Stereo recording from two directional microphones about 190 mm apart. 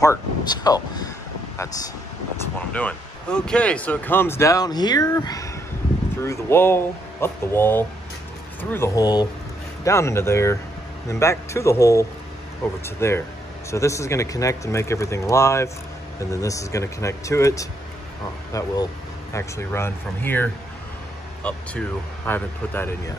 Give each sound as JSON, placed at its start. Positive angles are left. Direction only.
{"t": 0.7, "sound": "speech", "side_deg": 20}
{"t": 2.7, "sound": "speech", "side_deg": 5}